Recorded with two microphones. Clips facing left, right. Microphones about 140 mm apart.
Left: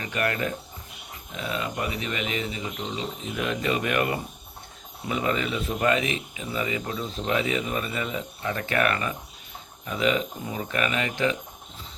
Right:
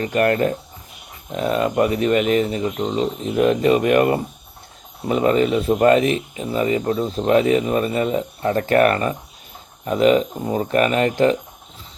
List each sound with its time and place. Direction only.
0.0 s speech: 40° right (ahead or behind)